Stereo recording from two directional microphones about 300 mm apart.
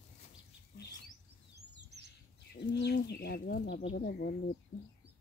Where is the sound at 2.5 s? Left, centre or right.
Left.